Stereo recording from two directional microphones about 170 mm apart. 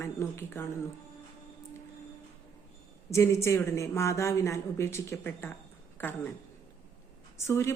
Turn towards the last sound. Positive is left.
turn(degrees=15)  # may be behind; listen again after turning